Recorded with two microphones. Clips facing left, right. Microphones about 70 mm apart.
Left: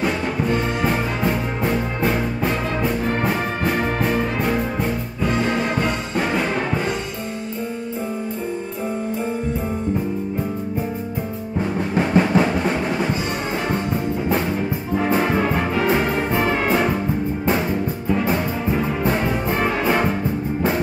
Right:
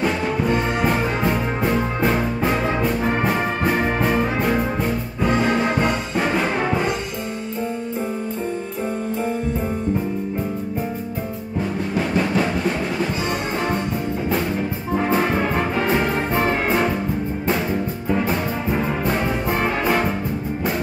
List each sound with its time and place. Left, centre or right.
0.0 s music: centre
5.2 s music: centre
12.0 s music: centre
16.3 s brass instrument: right